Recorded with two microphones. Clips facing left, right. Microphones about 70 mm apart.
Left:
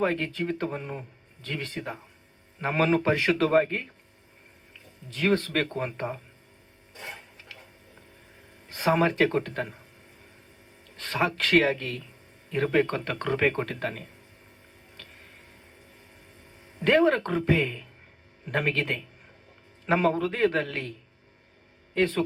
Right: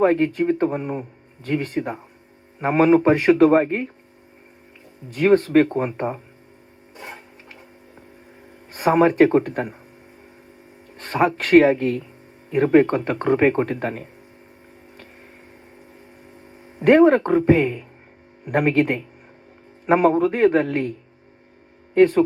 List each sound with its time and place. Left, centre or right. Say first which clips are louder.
0.0 s speech: right 9 dB; right
5.0 s speech: right 9 dB; right
8.7 s speech: right 7 dB; right
10.9 s speech: right 7 dB; right
16.8 s speech: right 8 dB; right
21.9 s speech: right 11 dB; right